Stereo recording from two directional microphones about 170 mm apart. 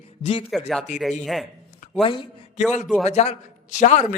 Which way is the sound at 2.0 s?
30° left (ahead or behind).